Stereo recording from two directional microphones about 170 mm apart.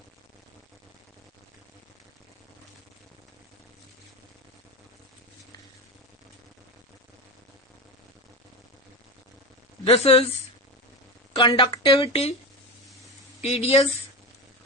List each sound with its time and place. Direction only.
9.8 s a woman's voice: 35° left (ahead or behind)
11.3 s a woman's voice: 30° left (ahead or behind)
13.4 s a woman's voice: 35° left (ahead or behind)